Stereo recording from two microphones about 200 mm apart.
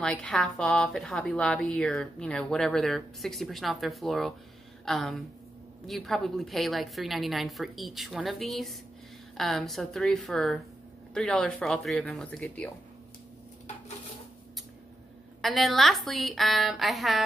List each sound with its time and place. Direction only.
0.0 s a woman's voice: 5° left (ahead or behind)
15.4 s a woman's voice: centre (ahead or behind)